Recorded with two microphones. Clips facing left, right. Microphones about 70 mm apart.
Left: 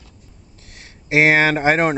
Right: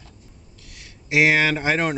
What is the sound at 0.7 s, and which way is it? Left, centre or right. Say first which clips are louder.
Speech: left 3 dB; left.